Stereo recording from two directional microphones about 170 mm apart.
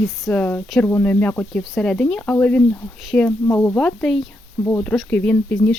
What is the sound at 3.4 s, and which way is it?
Speech, 15° left (ahead or behind).